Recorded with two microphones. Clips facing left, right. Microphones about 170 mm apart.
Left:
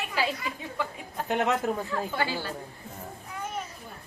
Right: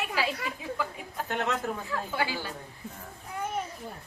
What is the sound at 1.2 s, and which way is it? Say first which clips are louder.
Speech: left 5 dB; 15° left (ahead or behind).